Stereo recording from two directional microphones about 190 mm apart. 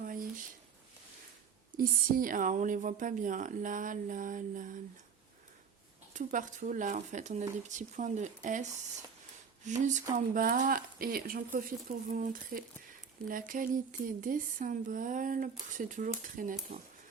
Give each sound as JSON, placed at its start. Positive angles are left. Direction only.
{"t": 0.0, "sound": "a sound", "side_deg": -45}
{"t": 1.7, "sound": "speech", "side_deg": -45}
{"t": 6.1, "sound": "speech", "side_deg": -40}